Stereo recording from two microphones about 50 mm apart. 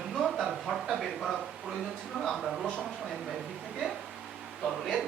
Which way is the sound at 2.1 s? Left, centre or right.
Right.